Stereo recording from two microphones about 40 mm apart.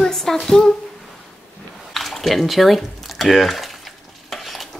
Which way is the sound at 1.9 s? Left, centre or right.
Centre.